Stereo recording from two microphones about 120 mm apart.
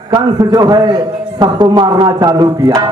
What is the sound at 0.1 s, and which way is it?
A man's voice, 35° right (ahead or behind).